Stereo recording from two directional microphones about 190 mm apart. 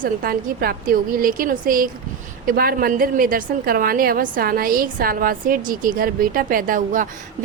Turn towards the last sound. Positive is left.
turn(degrees=-45)  # may be behind; listen again after turning